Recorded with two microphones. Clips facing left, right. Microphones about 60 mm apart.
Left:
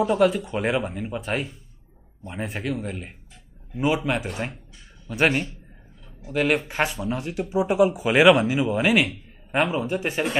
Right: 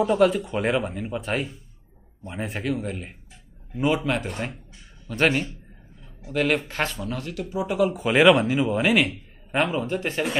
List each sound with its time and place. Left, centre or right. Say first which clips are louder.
0.0 s a man's voice: even; centre; by 7.9 s left
7.9 s a man's voice: right 2 dB; centre